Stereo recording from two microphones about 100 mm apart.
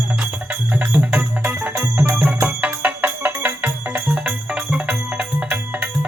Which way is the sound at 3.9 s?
10° right (ahead or behind).